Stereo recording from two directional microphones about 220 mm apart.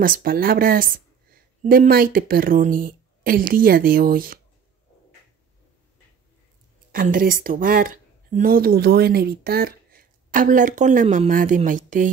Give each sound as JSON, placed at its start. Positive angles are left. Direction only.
{"t": 0.0, "sound": "speech", "side_deg": -40}
{"t": 6.9, "sound": "speech", "side_deg": -40}